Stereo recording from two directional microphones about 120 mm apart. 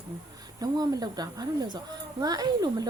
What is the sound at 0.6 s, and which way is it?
Speech, 30° right (ahead or behind).